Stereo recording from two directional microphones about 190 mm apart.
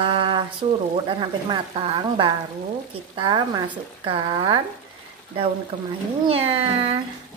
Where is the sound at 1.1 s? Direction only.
25° right (ahead or behind).